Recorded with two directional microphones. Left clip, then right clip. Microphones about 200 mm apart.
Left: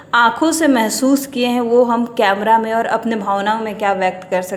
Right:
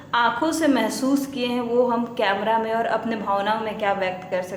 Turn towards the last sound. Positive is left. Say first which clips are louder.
# left 7 dB
turn(degrees=40)  # may be behind; listen again after turning